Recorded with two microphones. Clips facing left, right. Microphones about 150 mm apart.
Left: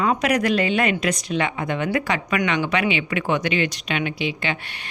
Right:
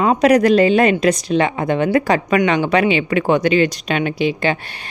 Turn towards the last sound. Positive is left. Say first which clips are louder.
# right 7 dB
turn(degrees=-40)  # may be behind; listen again after turning